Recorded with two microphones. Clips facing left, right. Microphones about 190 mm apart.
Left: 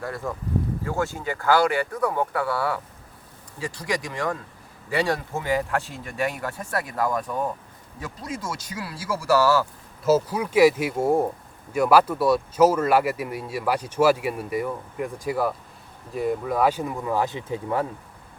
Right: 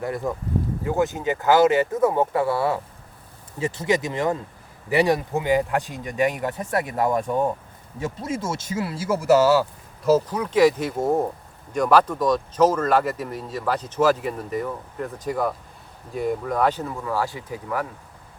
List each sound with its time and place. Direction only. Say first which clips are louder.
0.0 s speech: right 4 dB; 20° right (ahead or behind)
10.0 s speech: right 1 dB; 5° left (ahead or behind); by 17.8 s 25° left (ahead or behind)